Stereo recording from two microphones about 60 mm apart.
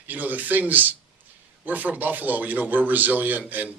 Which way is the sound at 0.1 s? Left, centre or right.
Right.